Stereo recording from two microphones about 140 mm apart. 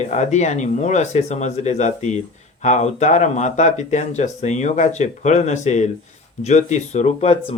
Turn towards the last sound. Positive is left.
turn(degrees=55)  # may be behind; listen again after turning